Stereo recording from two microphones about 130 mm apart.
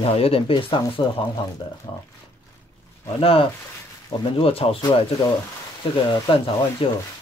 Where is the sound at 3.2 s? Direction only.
45° left (ahead or behind).